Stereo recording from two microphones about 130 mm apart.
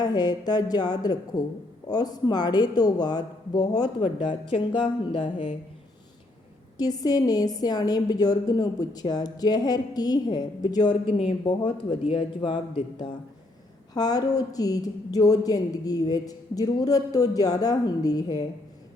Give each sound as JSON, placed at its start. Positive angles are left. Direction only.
{"t": 0.0, "sound": "speech", "side_deg": 30}
{"t": 6.7, "sound": "speech", "side_deg": 30}
{"t": 11.0, "sound": "a man's voice", "side_deg": 45}